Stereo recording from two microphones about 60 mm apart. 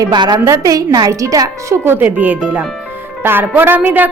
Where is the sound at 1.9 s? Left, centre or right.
Right.